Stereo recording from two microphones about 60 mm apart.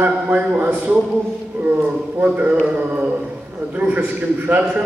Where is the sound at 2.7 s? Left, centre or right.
Right.